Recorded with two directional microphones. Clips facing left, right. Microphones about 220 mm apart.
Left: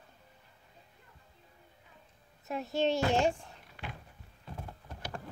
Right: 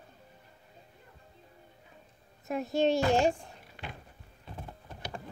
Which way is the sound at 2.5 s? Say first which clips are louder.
Right 3 dB; 15° right (ahead or behind).